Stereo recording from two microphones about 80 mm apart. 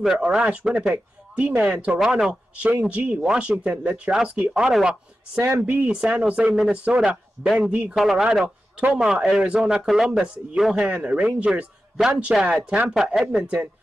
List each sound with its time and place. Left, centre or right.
0.0 s speech: centre
5.4 s a man's voice: right; by 13.2 s centre
13.4 s a man's voice: centre